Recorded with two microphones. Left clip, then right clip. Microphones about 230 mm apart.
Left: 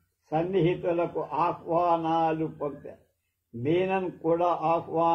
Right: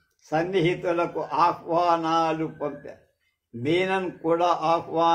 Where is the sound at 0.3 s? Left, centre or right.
Right.